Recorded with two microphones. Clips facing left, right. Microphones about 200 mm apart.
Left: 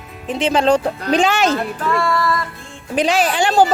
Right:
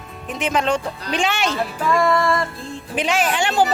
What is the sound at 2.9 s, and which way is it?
Speech, 35° left (ahead or behind).